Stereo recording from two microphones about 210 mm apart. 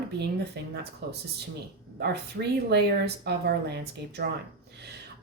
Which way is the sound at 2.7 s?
50° right (ahead or behind).